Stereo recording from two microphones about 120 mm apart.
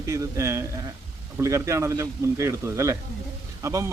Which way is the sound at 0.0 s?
25° right (ahead or behind).